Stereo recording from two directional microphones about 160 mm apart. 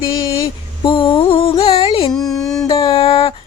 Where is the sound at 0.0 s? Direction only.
30° left (ahead or behind).